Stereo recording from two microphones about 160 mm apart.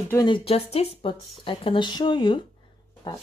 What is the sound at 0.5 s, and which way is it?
Speech, 40° left (ahead or behind).